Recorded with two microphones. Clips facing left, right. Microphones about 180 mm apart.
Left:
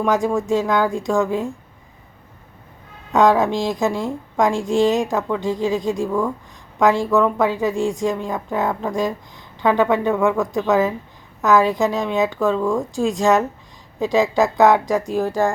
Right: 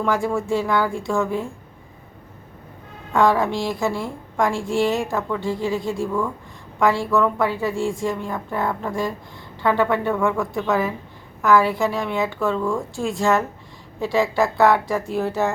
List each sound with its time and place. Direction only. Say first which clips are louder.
0.0 s a woman's voice: left 3 dB; 15° left (ahead or behind)
3.1 s a woman's voice: left 3 dB; 20° left (ahead or behind)